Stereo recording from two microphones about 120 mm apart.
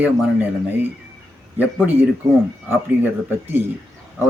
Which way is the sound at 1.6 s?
15° right (ahead or behind).